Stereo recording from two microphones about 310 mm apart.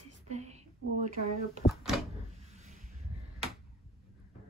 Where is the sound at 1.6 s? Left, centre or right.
Centre.